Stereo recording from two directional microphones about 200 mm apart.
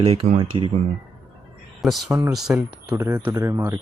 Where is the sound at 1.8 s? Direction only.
Centre (ahead or behind).